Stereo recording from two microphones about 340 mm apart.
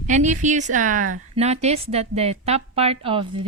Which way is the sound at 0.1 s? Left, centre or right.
Right.